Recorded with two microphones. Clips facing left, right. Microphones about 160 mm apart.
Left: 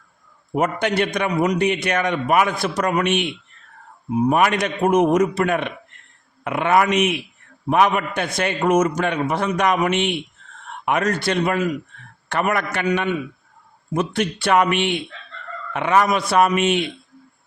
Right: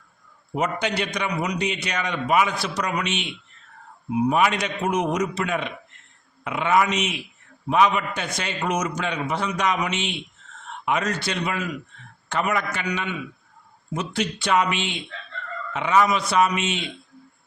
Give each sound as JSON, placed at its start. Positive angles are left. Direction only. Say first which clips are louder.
{"t": 0.5, "sound": "a man's voice", "louder": "left 5 dB", "side_deg": 55}